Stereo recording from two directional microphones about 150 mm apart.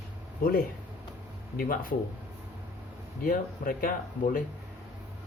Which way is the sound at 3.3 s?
70° left (ahead or behind).